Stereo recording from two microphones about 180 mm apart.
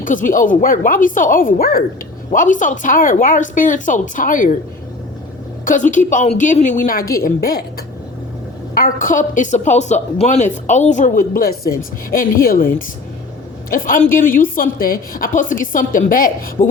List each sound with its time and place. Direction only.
0.0 s a woman's voice: 45° left (ahead or behind)
5.6 s a woman's voice: 45° left (ahead or behind)
8.7 s a woman's voice: 50° left (ahead or behind)